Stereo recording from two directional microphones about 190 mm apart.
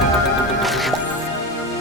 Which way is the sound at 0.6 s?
Centre (ahead or behind).